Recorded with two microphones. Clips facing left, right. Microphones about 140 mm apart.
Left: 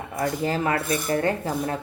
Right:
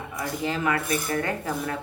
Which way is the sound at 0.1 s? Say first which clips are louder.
Left 4 dB; 45° left (ahead or behind).